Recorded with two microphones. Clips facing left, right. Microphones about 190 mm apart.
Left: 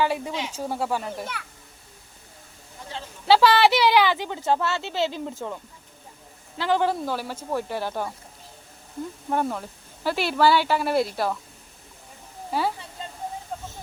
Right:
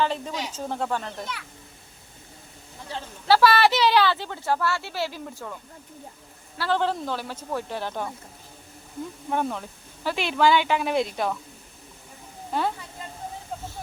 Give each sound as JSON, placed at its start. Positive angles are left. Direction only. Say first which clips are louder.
{"t": 0.0, "sound": "speech", "louder": "left 1 dB", "side_deg": 10}
{"t": 3.2, "sound": "speech", "louder": "left 1 dB", "side_deg": 15}
{"t": 6.6, "sound": "speech", "louder": "left 2 dB", "side_deg": 10}
{"t": 9.3, "sound": "speech", "louder": "left 1 dB", "side_deg": 5}
{"t": 12.5, "sound": "a woman's voice", "louder": "left 1 dB", "side_deg": 5}
{"t": 13.5, "sound": "a sound", "louder": "even", "side_deg": 0}